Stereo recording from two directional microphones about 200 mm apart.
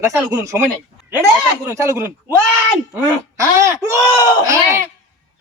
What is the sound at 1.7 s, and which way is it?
Speech, 15° right (ahead or behind).